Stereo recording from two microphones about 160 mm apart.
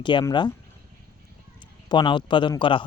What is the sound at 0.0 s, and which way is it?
Speech, 30° left (ahead or behind).